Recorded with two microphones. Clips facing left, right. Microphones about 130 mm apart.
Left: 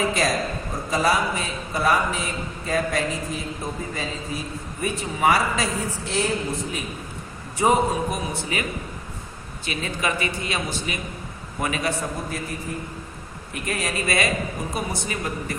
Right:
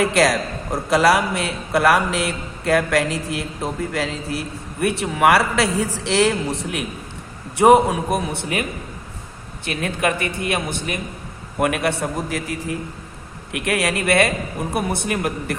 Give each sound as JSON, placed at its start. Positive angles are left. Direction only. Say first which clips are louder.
{"t": 0.0, "sound": "a man's voice", "louder": "right 5 dB", "side_deg": -75}
{"t": 9.6, "sound": "a man's voice", "louder": "right 5 dB", "side_deg": -60}
{"t": 13.5, "sound": "a man's voice", "louder": "right 6 dB", "side_deg": -75}